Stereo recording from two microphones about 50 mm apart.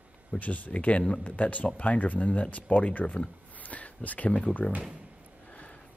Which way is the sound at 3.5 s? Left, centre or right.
Left.